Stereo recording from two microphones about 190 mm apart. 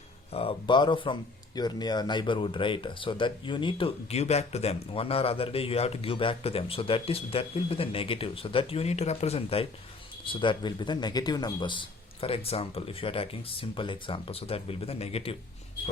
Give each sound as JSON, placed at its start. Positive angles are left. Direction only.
{"t": 0.3, "sound": "speech", "side_deg": 30}